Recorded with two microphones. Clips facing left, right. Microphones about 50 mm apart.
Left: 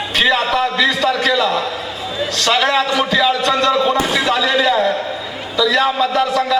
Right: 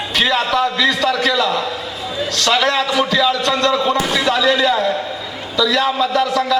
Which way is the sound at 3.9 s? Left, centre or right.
Centre.